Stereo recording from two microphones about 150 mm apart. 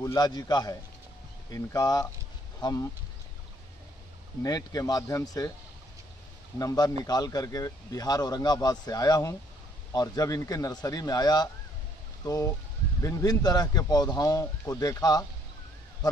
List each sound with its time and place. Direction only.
0.0 s speech: 25° left (ahead or behind)
4.4 s speech: 25° left (ahead or behind)
6.6 s speech: 25° left (ahead or behind)